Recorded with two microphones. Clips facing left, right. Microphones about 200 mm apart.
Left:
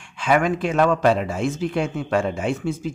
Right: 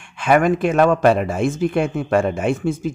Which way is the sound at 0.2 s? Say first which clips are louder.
Right 4 dB; 55° right (ahead or behind).